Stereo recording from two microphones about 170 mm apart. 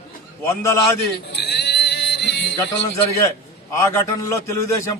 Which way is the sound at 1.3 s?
80° left.